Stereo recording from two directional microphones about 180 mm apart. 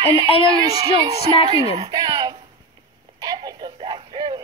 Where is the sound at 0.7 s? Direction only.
20° right (ahead or behind).